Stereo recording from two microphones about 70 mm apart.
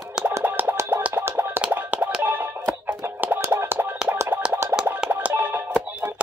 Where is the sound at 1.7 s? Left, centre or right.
Right.